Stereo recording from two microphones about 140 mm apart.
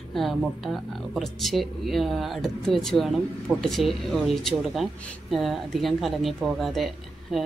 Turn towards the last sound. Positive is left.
turn(degrees=0)  # may be behind; listen again after turning